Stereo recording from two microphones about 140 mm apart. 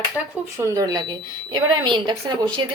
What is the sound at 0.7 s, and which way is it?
A woman's voice, 25° right (ahead or behind).